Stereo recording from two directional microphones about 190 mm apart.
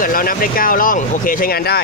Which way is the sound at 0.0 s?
50° left (ahead or behind).